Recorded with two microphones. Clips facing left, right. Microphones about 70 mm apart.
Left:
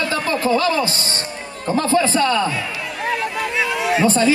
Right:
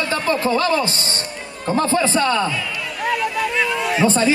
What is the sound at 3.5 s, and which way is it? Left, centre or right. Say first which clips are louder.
Speech: even; centre.